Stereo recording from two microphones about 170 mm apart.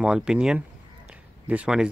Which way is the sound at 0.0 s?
5° right (ahead or behind).